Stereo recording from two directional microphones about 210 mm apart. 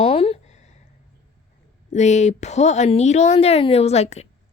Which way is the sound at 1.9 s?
35° left (ahead or behind).